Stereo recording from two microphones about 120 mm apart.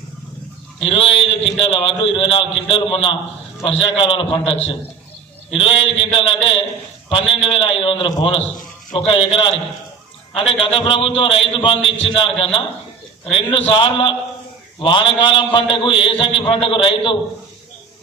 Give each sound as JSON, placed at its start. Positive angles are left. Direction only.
{"t": 0.8, "sound": "a man's voice", "side_deg": 55}